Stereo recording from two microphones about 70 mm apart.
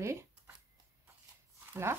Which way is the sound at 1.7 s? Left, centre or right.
Right.